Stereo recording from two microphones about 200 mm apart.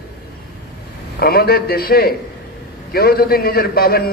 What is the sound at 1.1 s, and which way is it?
A man's voice, 50° left (ahead or behind).